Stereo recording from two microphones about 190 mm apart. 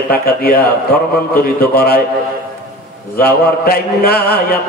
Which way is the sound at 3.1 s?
55° left (ahead or behind).